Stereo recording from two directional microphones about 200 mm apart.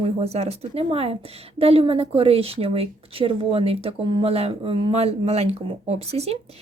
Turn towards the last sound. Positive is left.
turn(degrees=-30)  # may be behind; listen again after turning